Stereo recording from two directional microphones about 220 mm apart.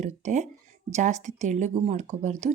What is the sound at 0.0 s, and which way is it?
Speech, 35° right (ahead or behind).